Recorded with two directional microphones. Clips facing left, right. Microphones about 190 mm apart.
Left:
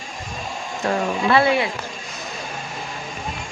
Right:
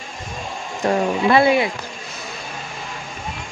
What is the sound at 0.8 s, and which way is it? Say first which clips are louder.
Speech: right 3 dB; 15° right (ahead or behind).